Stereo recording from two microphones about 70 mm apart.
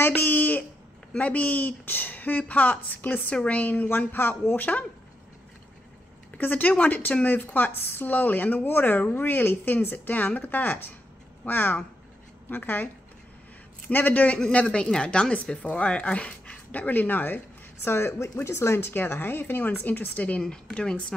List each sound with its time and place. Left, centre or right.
0.0 s a sound: left
1.1 s speech: left
6.3 s speech: left
17.8 s speech: left
20.4 s speech: centre